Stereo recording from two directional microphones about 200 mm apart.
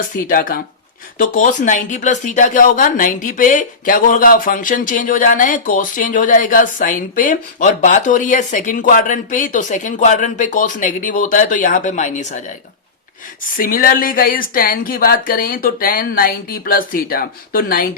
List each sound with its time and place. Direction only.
0.3 s speech: 45° left (ahead or behind)
13.6 s speech: 45° left (ahead or behind)